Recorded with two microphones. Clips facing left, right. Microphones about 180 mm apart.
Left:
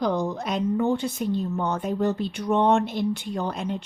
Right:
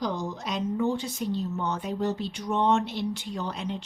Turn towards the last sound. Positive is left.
turn(degrees=50)  # may be behind; listen again after turning